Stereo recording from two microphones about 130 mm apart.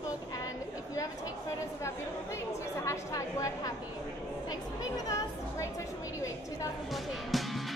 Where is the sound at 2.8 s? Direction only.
25° left (ahead or behind).